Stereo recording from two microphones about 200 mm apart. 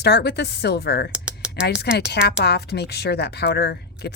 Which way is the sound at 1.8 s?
55° left (ahead or behind).